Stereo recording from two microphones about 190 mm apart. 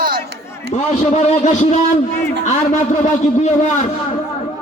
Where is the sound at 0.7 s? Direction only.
40° left (ahead or behind).